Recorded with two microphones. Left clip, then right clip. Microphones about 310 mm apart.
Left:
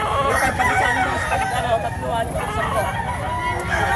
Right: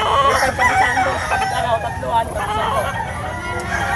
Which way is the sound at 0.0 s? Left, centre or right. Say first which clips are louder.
Right 4 dB; right.